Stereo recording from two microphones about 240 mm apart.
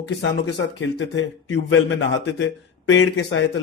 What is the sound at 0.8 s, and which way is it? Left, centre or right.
A man's voice, left.